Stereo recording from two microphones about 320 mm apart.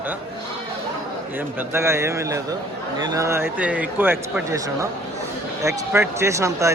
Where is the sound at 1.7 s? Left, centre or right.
Centre.